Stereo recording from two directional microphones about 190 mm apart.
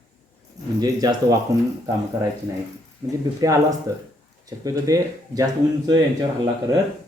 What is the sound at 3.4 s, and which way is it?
Speech, 20° right (ahead or behind).